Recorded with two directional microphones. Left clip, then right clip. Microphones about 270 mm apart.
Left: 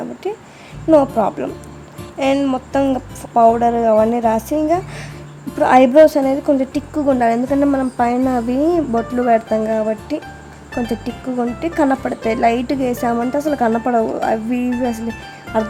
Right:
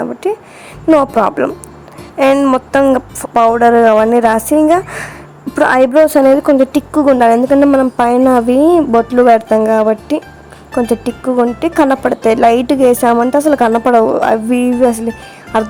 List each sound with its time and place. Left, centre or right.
0.0 s a woman's voice: centre